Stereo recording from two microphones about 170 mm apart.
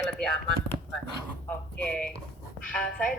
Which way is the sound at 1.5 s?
5° left (ahead or behind).